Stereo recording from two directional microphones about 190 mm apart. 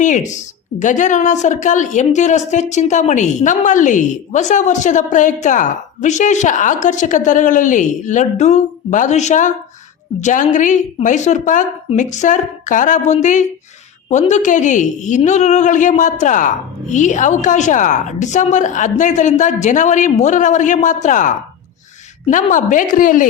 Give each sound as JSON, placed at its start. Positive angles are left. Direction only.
{"t": 0.0, "sound": "a woman's voice", "side_deg": 40}